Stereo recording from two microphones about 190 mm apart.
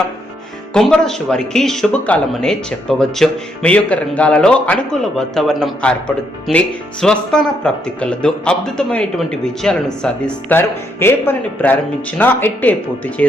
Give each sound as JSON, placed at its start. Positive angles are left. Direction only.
{"t": 0.7, "sound": "speech", "side_deg": 5}